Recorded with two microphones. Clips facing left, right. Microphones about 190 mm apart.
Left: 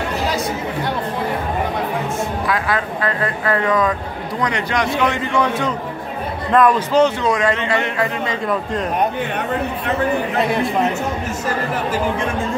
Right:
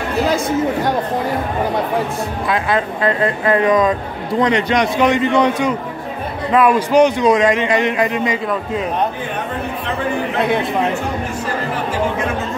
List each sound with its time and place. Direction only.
2.4 s a man's voice: 25° right (ahead or behind)